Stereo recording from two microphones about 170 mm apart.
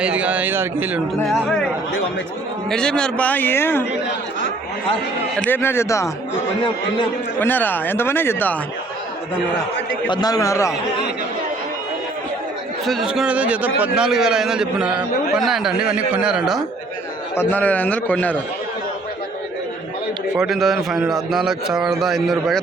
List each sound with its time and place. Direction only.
0.0 s speech: 5° right (ahead or behind)
1.2 s a man's voice: centre (ahead or behind)
2.6 s a man's voice: 5° left (ahead or behind)
5.4 s a man's voice: 10° left (ahead or behind)
7.3 s a man's voice: 10° left (ahead or behind)
10.1 s a man's voice: 25° left (ahead or behind)
12.8 s a man's voice: centre (ahead or behind)
17.3 s a man's voice: 10° left (ahead or behind)
20.3 s a man's voice: centre (ahead or behind)